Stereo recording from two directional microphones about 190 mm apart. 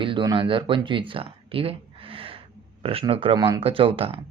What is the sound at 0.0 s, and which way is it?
Speech, 25° right (ahead or behind).